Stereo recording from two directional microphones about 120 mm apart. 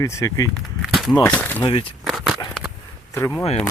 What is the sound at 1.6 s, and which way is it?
Speech, 50° left (ahead or behind).